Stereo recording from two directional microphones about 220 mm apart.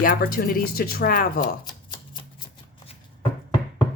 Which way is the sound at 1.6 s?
20° left (ahead or behind).